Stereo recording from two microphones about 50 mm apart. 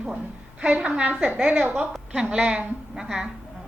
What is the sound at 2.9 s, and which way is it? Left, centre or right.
Speech, centre.